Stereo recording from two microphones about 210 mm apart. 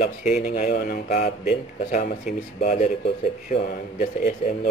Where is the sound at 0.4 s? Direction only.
35° left (ahead or behind).